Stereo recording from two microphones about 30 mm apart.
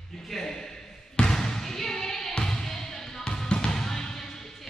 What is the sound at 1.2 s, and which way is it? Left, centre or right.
Basketball bounce, centre.